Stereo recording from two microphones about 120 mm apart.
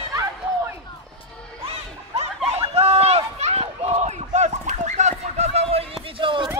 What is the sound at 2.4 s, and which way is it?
Run, 55° right (ahead or behind).